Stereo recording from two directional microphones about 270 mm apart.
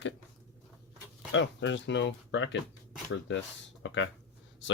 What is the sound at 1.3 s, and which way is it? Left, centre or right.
Speech, left.